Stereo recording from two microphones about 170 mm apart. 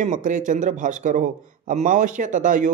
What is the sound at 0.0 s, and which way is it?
Speech, 50° right (ahead or behind).